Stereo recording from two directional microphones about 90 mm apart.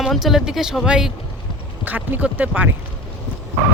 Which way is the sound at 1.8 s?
20° right (ahead or behind).